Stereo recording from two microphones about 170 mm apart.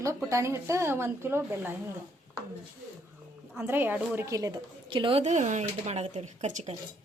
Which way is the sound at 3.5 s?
10° right (ahead or behind).